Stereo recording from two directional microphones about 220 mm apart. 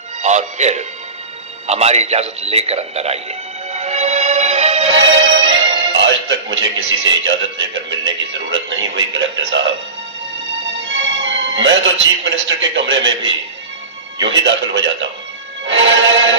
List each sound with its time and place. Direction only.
0.2 s music: 30° right (ahead or behind)
1.6 s a sound: 30° right (ahead or behind)
4.9 s music: 55° right (ahead or behind)
5.9 s speech: 55° right (ahead or behind)
10.9 s a man's voice: 55° right (ahead or behind)
15.6 s music: 55° right (ahead or behind)